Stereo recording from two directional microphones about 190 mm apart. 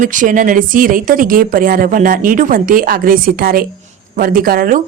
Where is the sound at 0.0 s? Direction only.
45° right (ahead or behind).